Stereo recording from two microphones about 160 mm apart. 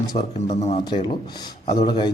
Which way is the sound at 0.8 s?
25° left (ahead or behind).